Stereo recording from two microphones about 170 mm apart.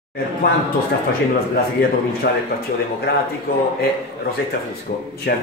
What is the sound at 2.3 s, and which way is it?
Speech, 70° left (ahead or behind).